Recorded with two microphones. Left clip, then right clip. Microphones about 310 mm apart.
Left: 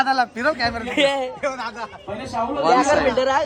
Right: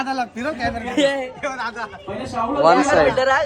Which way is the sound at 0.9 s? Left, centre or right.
Centre.